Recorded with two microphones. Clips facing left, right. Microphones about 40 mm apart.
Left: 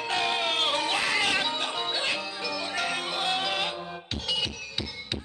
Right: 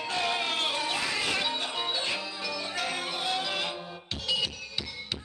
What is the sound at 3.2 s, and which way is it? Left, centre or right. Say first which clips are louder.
Music: left 4 dB; left.